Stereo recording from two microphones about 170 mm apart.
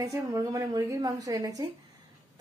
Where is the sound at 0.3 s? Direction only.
20° right (ahead or behind).